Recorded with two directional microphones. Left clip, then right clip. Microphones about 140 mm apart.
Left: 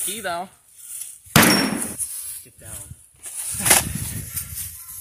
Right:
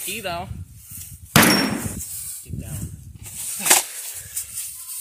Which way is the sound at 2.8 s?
Centre (ahead or behind).